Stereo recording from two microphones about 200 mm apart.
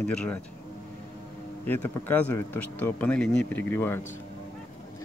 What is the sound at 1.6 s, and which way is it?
Speech, 10° left (ahead or behind).